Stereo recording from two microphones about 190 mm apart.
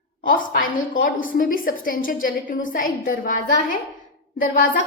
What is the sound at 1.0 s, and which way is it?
A woman's voice, 45° left (ahead or behind).